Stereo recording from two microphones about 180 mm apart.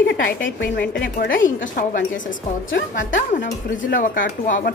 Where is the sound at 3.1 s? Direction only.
45° left (ahead or behind).